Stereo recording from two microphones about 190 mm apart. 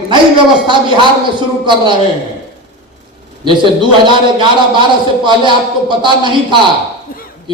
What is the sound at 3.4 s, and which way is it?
A man's voice, 25° right (ahead or behind).